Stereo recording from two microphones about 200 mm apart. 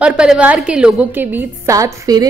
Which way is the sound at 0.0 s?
5° right (ahead or behind).